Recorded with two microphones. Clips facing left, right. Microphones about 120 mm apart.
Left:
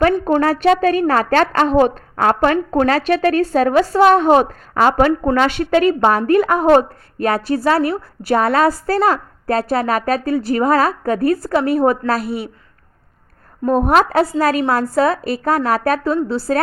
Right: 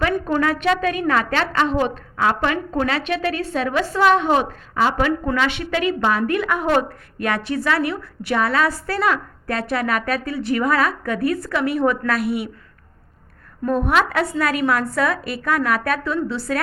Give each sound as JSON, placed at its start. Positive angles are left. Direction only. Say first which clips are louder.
{"t": 0.3, "sound": "a woman's voice", "louder": "left 5 dB", "side_deg": 40}
{"t": 13.7, "sound": "a woman's voice", "louder": "left 5 dB", "side_deg": 40}